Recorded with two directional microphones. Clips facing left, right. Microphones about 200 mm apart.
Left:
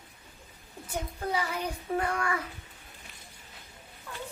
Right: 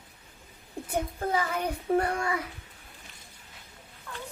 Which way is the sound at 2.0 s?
30° right (ahead or behind).